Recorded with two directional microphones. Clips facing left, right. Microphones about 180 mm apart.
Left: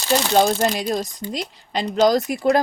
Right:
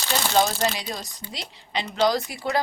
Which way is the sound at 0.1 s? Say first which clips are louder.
Left 5 dB; 55° left (ahead or behind).